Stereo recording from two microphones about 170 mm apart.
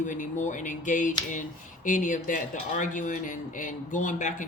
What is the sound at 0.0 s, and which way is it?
Speech, 45° left (ahead or behind).